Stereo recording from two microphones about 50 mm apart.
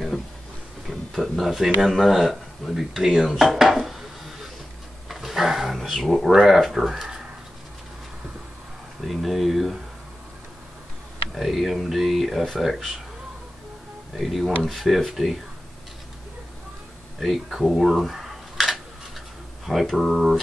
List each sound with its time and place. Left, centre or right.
0.8 s speech: centre
5.0 s a sound: centre
9.0 s speech: centre
11.3 s speech: centre
14.1 s speech: centre
17.2 s speech: centre